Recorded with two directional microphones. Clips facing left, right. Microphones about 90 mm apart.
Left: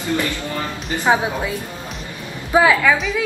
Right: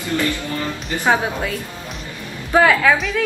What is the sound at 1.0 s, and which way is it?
Speech, 15° left (ahead or behind).